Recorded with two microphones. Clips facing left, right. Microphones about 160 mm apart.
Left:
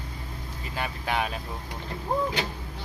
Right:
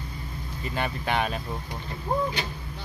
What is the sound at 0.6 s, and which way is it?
Speech, 5° left (ahead or behind).